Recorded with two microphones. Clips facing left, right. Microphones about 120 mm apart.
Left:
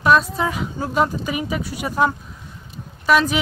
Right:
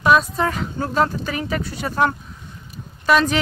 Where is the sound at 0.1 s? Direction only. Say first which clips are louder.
Even; 5° left (ahead or behind).